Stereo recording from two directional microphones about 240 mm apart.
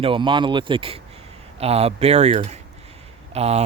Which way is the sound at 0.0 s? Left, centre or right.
Right.